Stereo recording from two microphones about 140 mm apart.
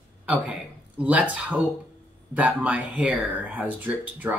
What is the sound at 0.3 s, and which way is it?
A man's voice, 10° right (ahead or behind).